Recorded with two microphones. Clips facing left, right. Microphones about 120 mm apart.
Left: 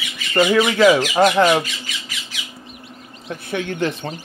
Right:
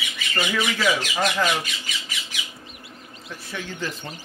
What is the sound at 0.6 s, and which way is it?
Speech, 60° left (ahead or behind).